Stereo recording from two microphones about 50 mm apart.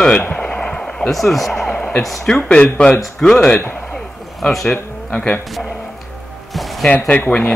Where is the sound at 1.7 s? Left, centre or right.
Centre.